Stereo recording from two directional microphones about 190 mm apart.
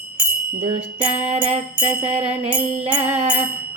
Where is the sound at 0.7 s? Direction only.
35° right (ahead or behind).